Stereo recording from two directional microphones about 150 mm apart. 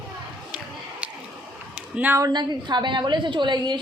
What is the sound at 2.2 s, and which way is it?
A woman's voice, 30° right (ahead or behind).